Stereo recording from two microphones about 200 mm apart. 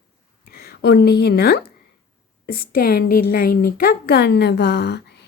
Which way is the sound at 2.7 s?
50° left (ahead or behind).